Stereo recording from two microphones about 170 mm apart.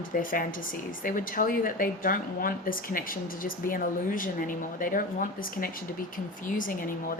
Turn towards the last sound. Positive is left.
turn(degrees=55)  # may be behind; listen again after turning